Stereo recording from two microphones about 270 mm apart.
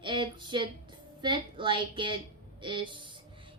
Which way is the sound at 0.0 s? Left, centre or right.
Centre.